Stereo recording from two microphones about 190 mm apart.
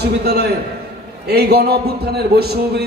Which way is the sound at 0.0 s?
60° right (ahead or behind).